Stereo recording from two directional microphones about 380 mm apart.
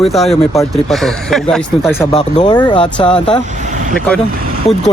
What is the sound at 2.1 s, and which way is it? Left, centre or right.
Speech, centre.